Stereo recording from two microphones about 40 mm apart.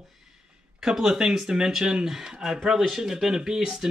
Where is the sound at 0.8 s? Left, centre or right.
Centre.